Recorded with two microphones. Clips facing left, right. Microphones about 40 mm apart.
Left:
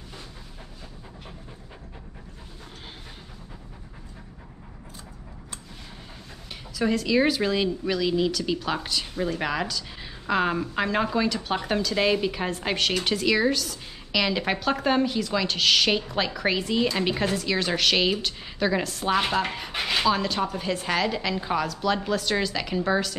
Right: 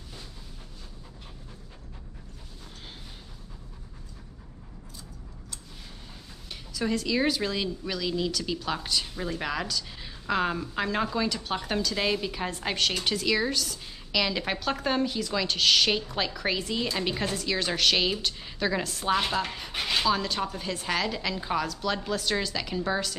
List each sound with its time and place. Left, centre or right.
6.5 s speech: centre
19.5 s speech: centre